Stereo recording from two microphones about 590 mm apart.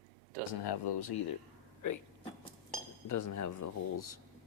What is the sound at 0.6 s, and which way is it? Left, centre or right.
Speech, left.